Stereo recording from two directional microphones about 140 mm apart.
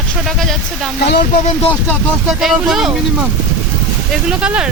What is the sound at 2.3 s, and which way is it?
Speech, 5° right (ahead or behind).